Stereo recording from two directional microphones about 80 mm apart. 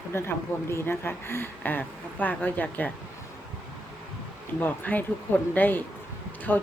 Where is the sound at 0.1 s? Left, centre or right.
Left.